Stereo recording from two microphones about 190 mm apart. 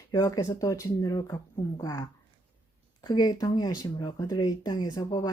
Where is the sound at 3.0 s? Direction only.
20° left (ahead or behind).